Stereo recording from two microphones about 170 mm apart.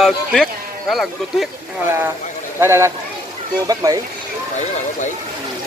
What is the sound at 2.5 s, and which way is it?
Speech, 15° right (ahead or behind).